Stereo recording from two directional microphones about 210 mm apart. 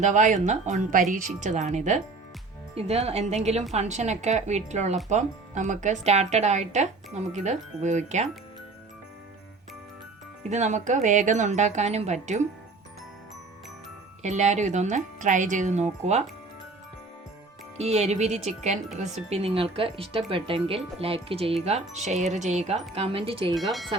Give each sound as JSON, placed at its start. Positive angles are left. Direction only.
{"t": 0.0, "sound": "speech", "side_deg": -35}
{"t": 10.5, "sound": "speech", "side_deg": -35}
{"t": 14.2, "sound": "speech", "side_deg": -35}
{"t": 17.7, "sound": "speech", "side_deg": -30}
{"t": 23.6, "sound": "speech", "side_deg": 0}